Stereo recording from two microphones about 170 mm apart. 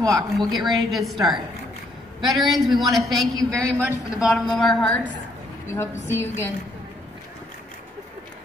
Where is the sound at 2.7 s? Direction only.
Centre (ahead or behind).